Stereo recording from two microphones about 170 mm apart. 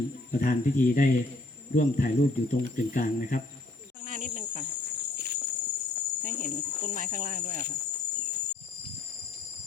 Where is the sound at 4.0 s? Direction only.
45° right (ahead or behind).